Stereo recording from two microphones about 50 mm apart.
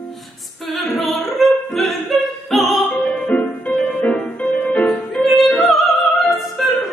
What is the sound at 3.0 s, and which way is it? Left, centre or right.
Music, left.